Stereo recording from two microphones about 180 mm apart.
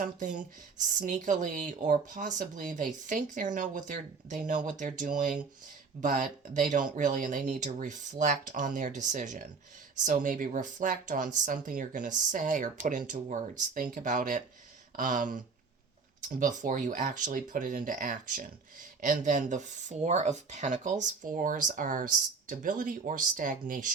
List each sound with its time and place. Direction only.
0.0 s speech: 45° right (ahead or behind)